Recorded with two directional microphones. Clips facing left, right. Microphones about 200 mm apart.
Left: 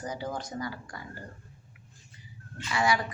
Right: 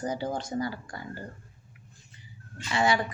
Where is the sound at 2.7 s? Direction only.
25° right (ahead or behind).